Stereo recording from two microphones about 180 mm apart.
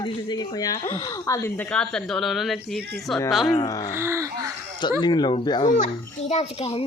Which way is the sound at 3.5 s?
20° left (ahead or behind).